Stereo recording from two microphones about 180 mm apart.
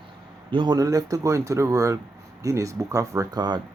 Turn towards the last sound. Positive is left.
turn(degrees=-20)  # may be behind; listen again after turning